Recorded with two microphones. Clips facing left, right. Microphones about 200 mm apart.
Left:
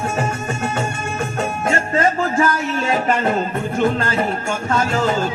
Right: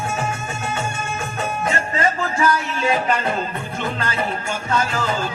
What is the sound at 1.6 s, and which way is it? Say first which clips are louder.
Music: left 4 dB; 50° left (ahead or behind).